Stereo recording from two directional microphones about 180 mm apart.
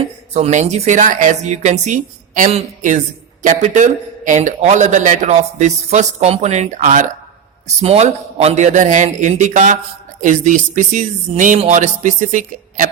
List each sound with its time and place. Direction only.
0.3 s a man's voice: 40° right (ahead or behind)